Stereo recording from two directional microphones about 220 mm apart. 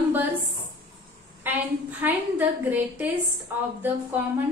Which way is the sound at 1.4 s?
10° right (ahead or behind).